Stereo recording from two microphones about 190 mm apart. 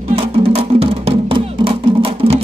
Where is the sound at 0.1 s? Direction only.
30° right (ahead or behind).